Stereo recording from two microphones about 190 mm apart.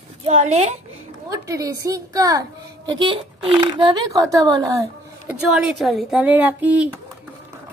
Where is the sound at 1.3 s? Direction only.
15° right (ahead or behind).